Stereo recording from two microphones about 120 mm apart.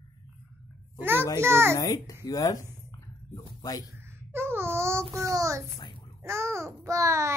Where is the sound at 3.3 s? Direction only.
30° left (ahead or behind).